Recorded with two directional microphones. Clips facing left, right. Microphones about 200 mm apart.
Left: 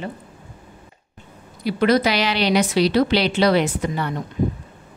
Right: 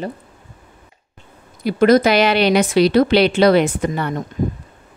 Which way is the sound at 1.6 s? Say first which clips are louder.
Right 5 dB; 50° right (ahead or behind).